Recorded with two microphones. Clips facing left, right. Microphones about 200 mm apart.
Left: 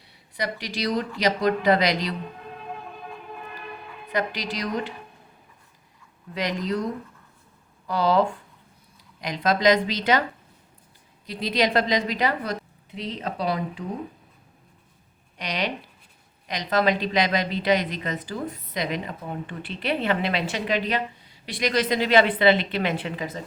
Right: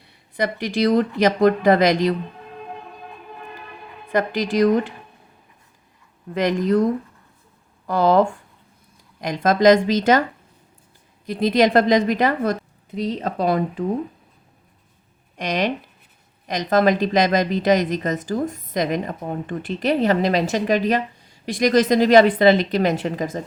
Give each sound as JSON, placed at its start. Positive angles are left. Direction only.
{"t": 0.3, "sound": "speech", "side_deg": -50}
{"t": 4.1, "sound": "speech", "side_deg": -50}
{"t": 6.3, "sound": "speech", "side_deg": -50}
{"t": 7.9, "sound": "speech", "side_deg": -50}
{"t": 11.3, "sound": "speech", "side_deg": -50}
{"t": 15.4, "sound": "speech", "side_deg": -45}